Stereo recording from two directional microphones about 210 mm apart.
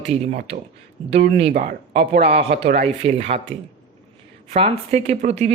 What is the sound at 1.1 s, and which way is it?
Speech, 30° right (ahead or behind).